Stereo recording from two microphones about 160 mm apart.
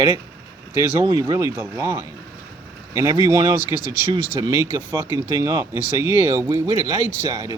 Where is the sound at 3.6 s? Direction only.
60° left (ahead or behind).